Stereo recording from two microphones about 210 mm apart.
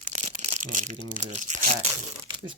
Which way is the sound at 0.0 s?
35° right (ahead or behind).